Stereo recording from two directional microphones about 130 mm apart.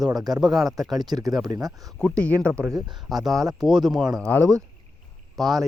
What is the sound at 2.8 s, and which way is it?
Speech, 35° right (ahead or behind).